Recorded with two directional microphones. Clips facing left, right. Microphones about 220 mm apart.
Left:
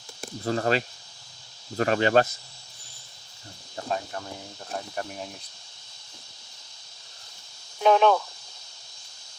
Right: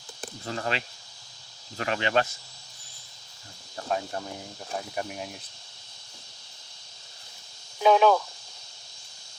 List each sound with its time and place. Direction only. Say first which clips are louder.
0.4 s speech: left 7 dB; 40° left (ahead or behind)
3.8 s speech: even; 20° left (ahead or behind)
4.9 s speech: right 1 dB; 10° right (ahead or behind)
7.8 s speech: even; 5° right (ahead or behind)